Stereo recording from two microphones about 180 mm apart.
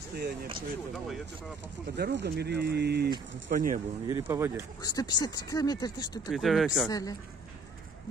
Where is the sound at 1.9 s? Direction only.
70° right (ahead or behind).